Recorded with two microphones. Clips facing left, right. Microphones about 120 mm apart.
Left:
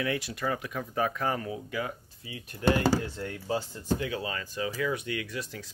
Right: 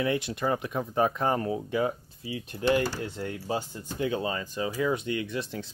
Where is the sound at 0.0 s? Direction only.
25° right (ahead or behind).